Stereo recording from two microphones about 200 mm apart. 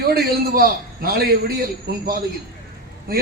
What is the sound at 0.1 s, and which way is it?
A man's voice, 50° right (ahead or behind).